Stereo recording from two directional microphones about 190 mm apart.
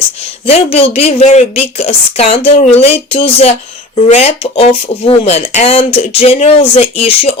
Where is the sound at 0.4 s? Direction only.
30° left (ahead or behind).